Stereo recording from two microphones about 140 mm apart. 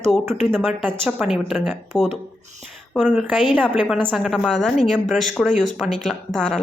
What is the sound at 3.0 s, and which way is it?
A woman's voice, 10° right (ahead or behind).